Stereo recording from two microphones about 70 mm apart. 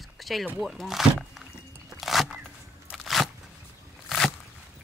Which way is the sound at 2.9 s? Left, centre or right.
Centre.